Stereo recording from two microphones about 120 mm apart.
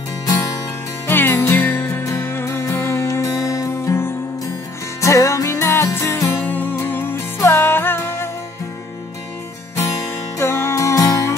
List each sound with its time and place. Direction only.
0.3 s music: 30° left (ahead or behind)
1.0 s music: 20° left (ahead or behind)
10.4 s music: 20° left (ahead or behind)